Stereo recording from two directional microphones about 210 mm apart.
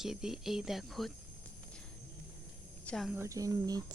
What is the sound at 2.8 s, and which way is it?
Speech, centre (ahead or behind).